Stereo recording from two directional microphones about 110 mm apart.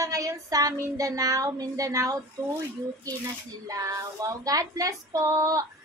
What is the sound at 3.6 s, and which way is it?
Speech, 30° right (ahead or behind).